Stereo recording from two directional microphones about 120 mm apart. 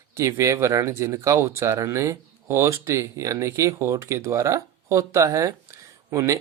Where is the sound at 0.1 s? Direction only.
25° right (ahead or behind).